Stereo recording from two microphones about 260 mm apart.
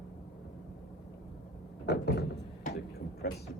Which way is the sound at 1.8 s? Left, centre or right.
Left.